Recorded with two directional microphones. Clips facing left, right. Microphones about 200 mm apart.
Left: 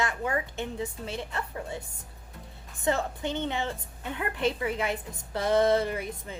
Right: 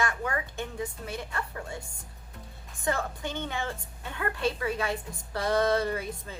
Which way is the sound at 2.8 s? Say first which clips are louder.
Left 3 dB; 20° left (ahead or behind).